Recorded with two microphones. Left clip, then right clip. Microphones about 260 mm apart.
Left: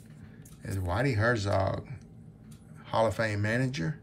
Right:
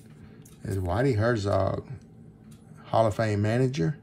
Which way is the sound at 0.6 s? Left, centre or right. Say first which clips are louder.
Right 4 dB; centre.